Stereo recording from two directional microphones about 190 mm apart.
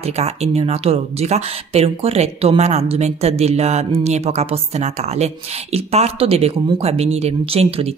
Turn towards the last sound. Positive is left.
turn(degrees=-30)  # may be behind; listen again after turning